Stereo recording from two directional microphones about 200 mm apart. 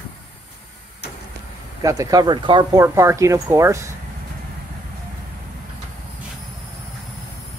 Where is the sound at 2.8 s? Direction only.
15° right (ahead or behind).